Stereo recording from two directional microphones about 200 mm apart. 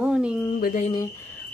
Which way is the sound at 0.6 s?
45° left (ahead or behind).